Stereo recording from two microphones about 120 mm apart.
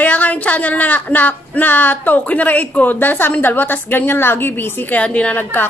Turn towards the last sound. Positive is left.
turn(degrees=15)  # may be behind; listen again after turning